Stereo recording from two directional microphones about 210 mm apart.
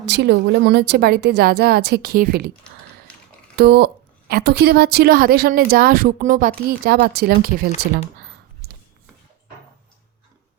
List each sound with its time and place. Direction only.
0.0 s a woman's voice: 55° right (ahead or behind)
3.6 s a woman's voice: 50° right (ahead or behind)